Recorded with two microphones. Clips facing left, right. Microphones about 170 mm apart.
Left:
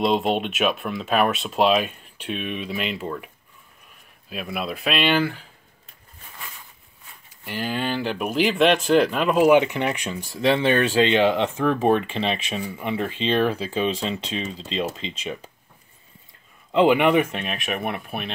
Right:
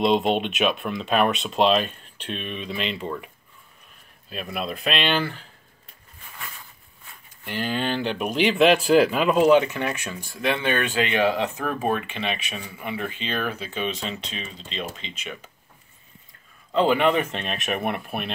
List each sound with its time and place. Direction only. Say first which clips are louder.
0.0 s speech: right 1 dB; centre (ahead or behind)
4.3 s speech: left 1 dB; 5° left (ahead or behind)
7.4 s speech: even; 5° left (ahead or behind)
9.5 s speech: left 1 dB; 20° left (ahead or behind)
10.4 s speech: left 5 dB; 30° left (ahead or behind)
16.7 s speech: left 3 dB; 15° left (ahead or behind); by 18.3 s centre (ahead or behind)